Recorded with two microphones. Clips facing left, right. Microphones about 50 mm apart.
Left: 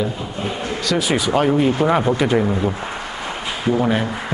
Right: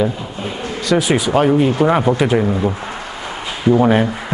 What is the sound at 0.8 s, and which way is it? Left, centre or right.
Speech, centre.